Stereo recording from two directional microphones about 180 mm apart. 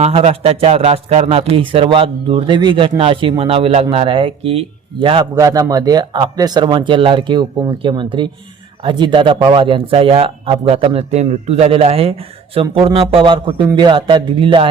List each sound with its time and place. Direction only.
0.0 s speech: 35° right (ahead or behind)